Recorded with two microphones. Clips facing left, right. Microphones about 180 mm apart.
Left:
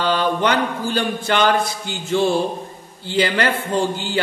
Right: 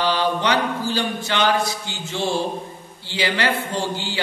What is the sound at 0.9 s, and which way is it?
Speech, 50° left (ahead or behind).